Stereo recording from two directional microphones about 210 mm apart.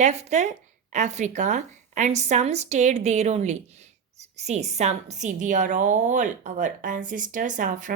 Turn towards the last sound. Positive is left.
turn(degrees=-35)  # may be behind; listen again after turning